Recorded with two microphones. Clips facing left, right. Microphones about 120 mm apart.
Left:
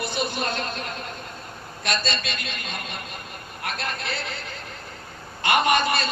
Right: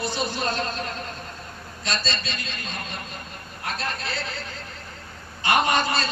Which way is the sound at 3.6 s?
60° left (ahead or behind).